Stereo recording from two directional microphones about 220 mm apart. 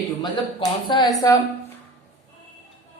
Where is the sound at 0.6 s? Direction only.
20° left (ahead or behind).